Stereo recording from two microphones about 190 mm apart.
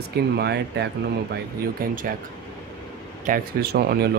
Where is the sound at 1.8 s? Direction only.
50° right (ahead or behind).